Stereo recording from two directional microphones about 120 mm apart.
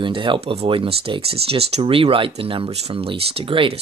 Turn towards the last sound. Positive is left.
turn(degrees=-45)  # may be behind; listen again after turning